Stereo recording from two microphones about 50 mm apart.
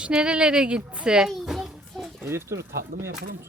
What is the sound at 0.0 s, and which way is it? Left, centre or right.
Speech, centre.